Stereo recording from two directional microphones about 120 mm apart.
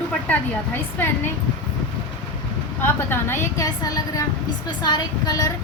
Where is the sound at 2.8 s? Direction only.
20° left (ahead or behind).